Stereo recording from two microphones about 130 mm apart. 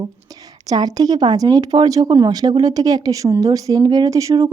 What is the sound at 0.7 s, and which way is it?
Speech, 30° right (ahead or behind).